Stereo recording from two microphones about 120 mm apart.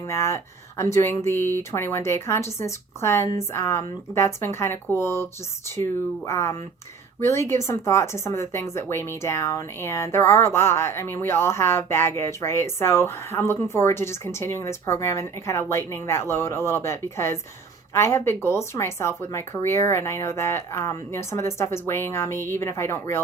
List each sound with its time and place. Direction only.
0.0 s a woman's voice: 20° left (ahead or behind)